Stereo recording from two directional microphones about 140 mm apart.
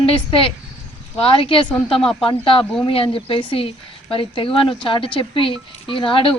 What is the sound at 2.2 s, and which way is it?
A woman's voice, 40° left (ahead or behind).